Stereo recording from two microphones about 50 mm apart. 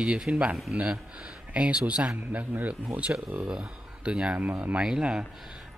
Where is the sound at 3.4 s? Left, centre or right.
Centre.